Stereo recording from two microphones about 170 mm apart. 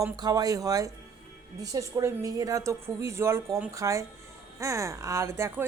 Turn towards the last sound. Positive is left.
turn(degrees=-15)  # may be behind; listen again after turning